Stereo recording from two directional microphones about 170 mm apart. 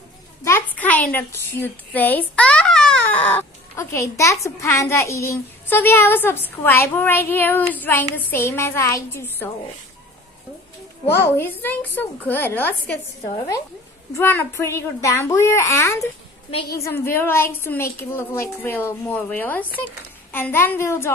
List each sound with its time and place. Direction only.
0.4 s a woman's voice: 15° left (ahead or behind)
3.3 s a child's voice: 15° left (ahead or behind)
11.1 s a child's voice: 15° left (ahead or behind)
14.1 s a child's voice: 15° left (ahead or behind)